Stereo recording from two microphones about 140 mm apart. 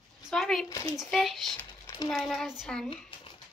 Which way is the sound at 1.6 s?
20° left (ahead or behind).